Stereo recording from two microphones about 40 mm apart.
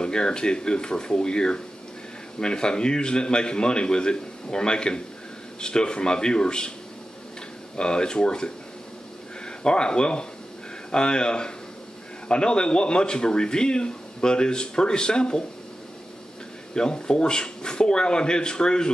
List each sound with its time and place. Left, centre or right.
0.0 s a man's voice: left
7.7 s a man's voice: left
9.6 s a man's voice: left
16.7 s a man's voice: left